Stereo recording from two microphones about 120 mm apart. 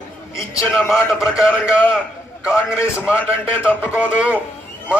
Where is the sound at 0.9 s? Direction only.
Centre (ahead or behind).